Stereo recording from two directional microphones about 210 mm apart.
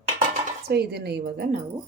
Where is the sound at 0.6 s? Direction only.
50° right (ahead or behind).